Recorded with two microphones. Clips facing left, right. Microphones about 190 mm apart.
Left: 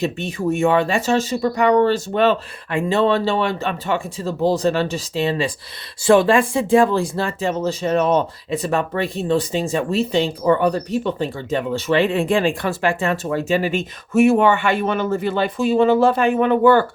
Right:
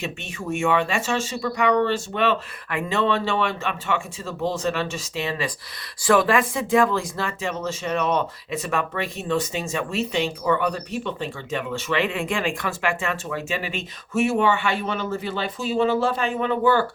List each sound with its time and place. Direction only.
0.0 s speech: 35° left (ahead or behind); by 16.8 s 55° left (ahead or behind)